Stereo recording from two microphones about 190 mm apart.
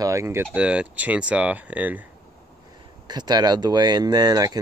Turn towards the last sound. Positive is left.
turn(degrees=-20)  # may be behind; listen again after turning